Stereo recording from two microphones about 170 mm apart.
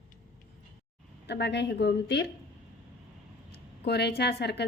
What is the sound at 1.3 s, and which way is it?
A woman's voice, 85° left.